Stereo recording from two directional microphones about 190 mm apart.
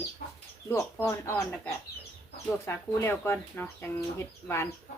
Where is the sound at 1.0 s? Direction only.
15° left (ahead or behind).